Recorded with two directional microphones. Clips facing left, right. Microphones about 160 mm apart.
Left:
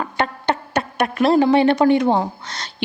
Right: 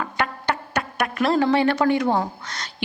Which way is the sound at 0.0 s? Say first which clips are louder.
Left 3 dB; 25° left (ahead or behind).